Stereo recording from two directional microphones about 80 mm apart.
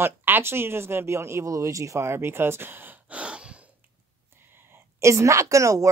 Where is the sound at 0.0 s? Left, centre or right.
Right.